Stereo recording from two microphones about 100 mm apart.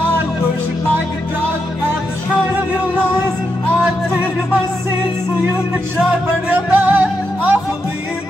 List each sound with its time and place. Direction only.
6.7 s music: 15° right (ahead or behind)